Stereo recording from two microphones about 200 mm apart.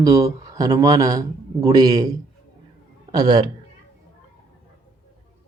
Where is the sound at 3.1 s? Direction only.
20° right (ahead or behind).